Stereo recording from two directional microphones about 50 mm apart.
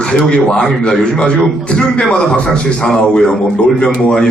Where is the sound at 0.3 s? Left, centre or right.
Centre.